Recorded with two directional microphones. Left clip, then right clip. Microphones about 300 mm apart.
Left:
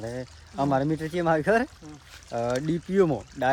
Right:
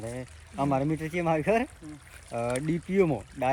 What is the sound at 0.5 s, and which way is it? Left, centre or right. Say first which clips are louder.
Speech: left 3 dB; centre.